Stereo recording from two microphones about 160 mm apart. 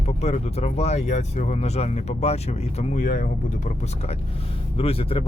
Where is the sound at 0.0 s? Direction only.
40° left (ahead or behind).